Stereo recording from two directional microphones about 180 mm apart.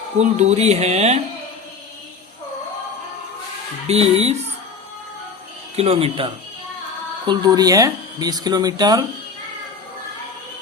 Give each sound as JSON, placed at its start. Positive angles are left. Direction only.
{"t": 0.2, "sound": "speech", "side_deg": -40}
{"t": 3.8, "sound": "speech", "side_deg": -35}
{"t": 5.7, "sound": "speech", "side_deg": -35}